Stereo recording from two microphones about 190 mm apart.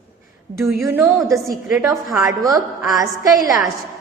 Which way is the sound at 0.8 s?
15° right (ahead or behind).